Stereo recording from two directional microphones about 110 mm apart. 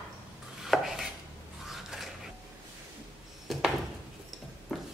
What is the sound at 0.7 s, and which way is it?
Chopping, centre (ahead or behind).